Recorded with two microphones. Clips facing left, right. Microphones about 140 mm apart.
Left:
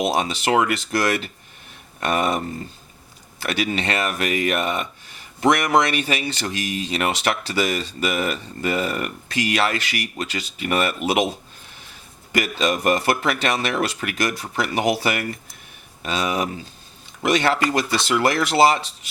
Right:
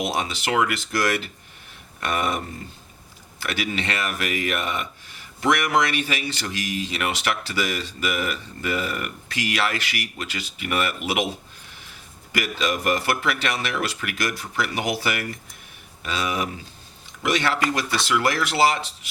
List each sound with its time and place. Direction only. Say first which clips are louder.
0.0 s speech: left 5 dB; 30° left (ahead or behind)
3.4 s speech: left 4 dB; 30° left (ahead or behind)
12.3 s speech: left 4 dB; 30° left (ahead or behind)